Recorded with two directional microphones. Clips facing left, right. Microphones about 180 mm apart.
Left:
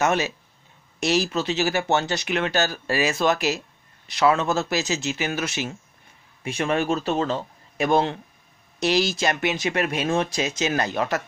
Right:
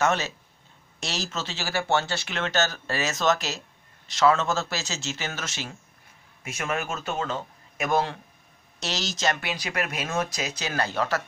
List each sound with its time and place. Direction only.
0.0 s speech: 15° left (ahead or behind)
6.4 s a man's voice: 30° left (ahead or behind)
8.7 s speech: 10° left (ahead or behind)